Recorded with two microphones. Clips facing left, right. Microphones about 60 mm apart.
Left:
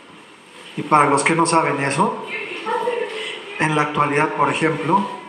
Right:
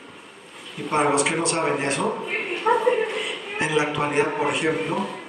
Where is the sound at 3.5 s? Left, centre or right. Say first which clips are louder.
Left 5 dB; left.